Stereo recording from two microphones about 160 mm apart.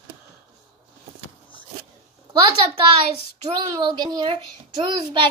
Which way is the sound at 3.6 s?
25° right (ahead or behind).